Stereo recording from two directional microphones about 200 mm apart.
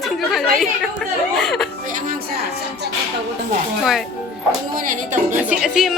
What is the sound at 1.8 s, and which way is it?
Music, 40° right (ahead or behind).